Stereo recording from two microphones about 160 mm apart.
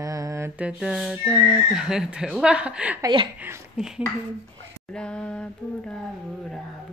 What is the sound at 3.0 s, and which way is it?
Speech, 30° right (ahead or behind).